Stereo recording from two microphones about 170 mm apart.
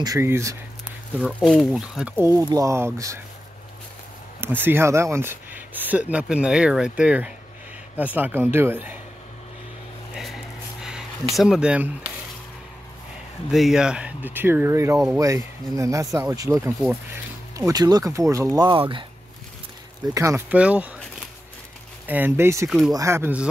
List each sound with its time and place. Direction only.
0.0 s speech: 20° right (ahead or behind)
1.2 s speech: centre (ahead or behind); by 3.2 s 15° right (ahead or behind)
4.4 s speech: 10° right (ahead or behind)
10.8 s a sound: 5° right (ahead or behind)
11.3 s speech: centre (ahead or behind)
13.5 s speech: centre (ahead or behind); by 19.0 s 30° right (ahead or behind)
20.2 s speech: 15° right (ahead or behind)
22.0 s speech: 10° right (ahead or behind)
22.7 s speech: centre (ahead or behind)
22.9 s speech: 15° right (ahead or behind)